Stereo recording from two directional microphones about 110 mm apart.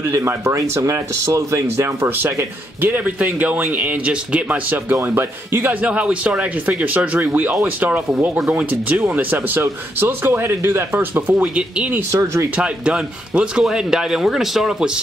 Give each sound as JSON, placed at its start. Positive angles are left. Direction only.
{"t": 0.1, "sound": "speech", "side_deg": -25}
{"t": 12.1, "sound": "speech", "side_deg": -30}
{"t": 12.5, "sound": "speech", "side_deg": -10}